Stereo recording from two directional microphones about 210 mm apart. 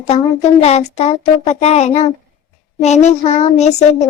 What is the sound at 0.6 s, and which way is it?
A child's voice, 30° left (ahead or behind).